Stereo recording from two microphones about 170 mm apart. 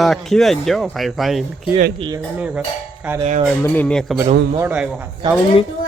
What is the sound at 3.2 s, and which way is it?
Speech, 40° right (ahead or behind).